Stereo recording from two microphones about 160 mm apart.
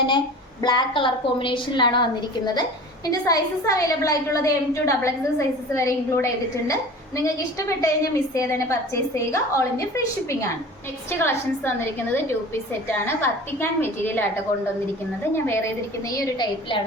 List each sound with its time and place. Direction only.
0.6 s a woman's voice: 25° left (ahead or behind)
3.1 s a woman's voice: 20° left (ahead or behind)
13.2 s a woman's voice: 15° left (ahead or behind)
15.4 s a woman's voice: 15° left (ahead or behind)